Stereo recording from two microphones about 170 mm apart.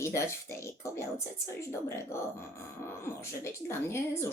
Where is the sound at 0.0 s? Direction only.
15° left (ahead or behind).